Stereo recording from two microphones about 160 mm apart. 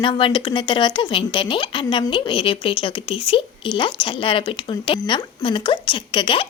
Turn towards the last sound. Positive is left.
turn(degrees=30)  # may be behind; listen again after turning